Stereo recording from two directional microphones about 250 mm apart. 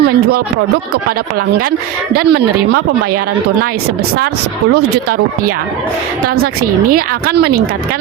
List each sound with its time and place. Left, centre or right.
0.0 s speech: right
4.7 s speech: right
6.6 s speech: right